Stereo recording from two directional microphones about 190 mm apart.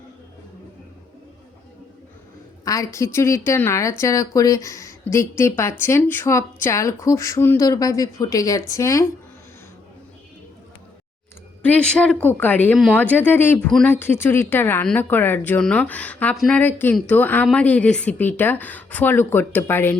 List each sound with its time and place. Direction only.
2.6 s speech: 15° left (ahead or behind)
11.6 s speech: 5° left (ahead or behind)